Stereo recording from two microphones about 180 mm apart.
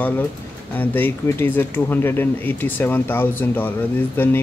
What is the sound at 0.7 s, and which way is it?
Speech, 10° left (ahead or behind).